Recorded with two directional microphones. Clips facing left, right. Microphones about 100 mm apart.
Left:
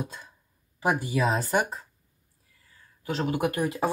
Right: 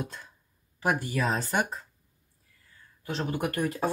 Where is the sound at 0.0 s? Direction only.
5° left (ahead or behind).